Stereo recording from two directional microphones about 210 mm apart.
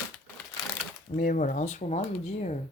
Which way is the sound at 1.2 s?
40° left (ahead or behind).